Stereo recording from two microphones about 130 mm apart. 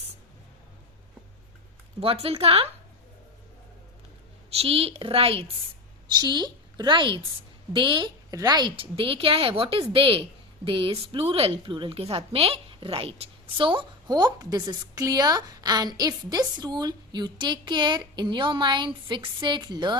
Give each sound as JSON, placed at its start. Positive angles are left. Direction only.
{"t": 2.0, "sound": "speech", "side_deg": -50}
{"t": 4.4, "sound": "speech", "side_deg": -50}
{"t": 6.1, "sound": "a woman's voice", "side_deg": -35}